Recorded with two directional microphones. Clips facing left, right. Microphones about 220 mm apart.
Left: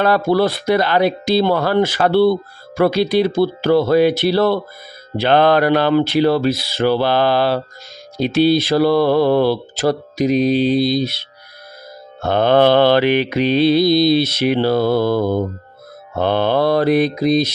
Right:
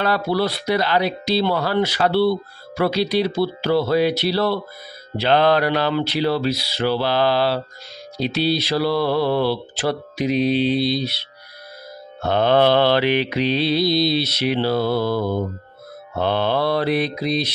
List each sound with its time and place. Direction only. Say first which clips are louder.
0.0 s speech: left 5 dB; 50° left (ahead or behind)